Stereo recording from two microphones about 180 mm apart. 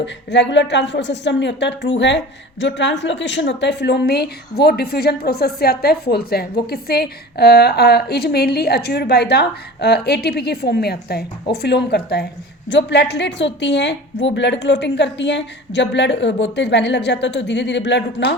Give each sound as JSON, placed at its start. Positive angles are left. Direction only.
{"t": 0.0, "sound": "speech", "side_deg": 75}
{"t": 14.3, "sound": "a woman's voice", "side_deg": 85}